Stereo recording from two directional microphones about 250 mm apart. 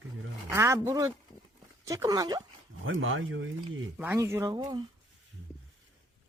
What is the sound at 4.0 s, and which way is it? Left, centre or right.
Speech, centre.